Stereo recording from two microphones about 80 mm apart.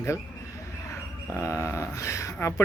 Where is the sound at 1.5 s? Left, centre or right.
Left.